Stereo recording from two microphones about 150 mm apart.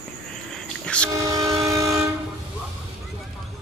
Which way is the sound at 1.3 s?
20° right (ahead or behind).